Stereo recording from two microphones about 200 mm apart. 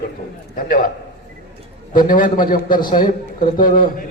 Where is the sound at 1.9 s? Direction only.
45° left (ahead or behind).